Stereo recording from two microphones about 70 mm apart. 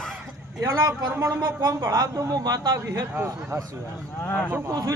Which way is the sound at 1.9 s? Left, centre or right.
Right.